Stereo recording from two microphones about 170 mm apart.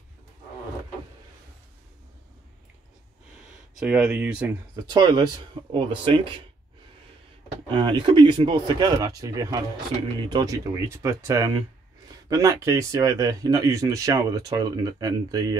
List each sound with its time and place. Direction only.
3.7 s speech: 5° right (ahead or behind)
4.8 s speech: 25° right (ahead or behind)
7.7 s speech: 30° right (ahead or behind)